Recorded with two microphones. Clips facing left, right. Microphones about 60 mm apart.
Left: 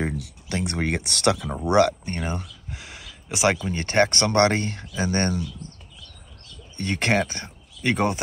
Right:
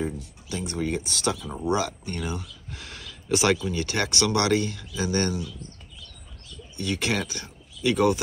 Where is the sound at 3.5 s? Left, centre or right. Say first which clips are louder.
Left 6 dB; left.